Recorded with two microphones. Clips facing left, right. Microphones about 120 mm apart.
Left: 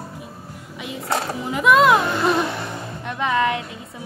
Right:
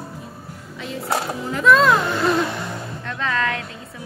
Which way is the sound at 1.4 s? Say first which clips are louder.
Left 1 dB; 10° left (ahead or behind).